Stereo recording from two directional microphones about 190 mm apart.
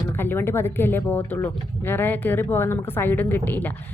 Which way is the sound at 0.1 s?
10° left (ahead or behind).